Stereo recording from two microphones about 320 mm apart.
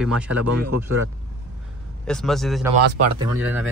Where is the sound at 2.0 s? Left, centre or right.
Centre.